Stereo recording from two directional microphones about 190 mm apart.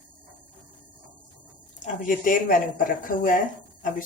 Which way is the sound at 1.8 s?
45° left (ahead or behind).